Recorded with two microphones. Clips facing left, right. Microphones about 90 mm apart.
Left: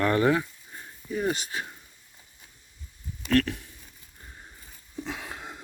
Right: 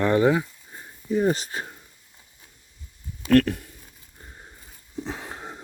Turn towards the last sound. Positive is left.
turn(degrees=-30)  # may be behind; listen again after turning